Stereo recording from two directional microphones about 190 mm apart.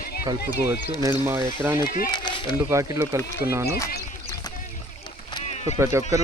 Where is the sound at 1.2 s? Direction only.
10° right (ahead or behind).